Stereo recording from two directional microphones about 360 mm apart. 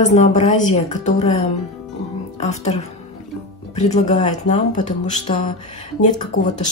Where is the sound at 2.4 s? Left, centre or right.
Centre.